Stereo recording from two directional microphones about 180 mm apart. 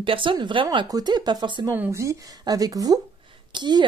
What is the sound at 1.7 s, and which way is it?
Speech, 15° right (ahead or behind).